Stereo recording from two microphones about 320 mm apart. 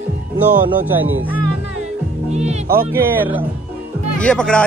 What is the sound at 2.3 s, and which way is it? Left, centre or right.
Speech, right.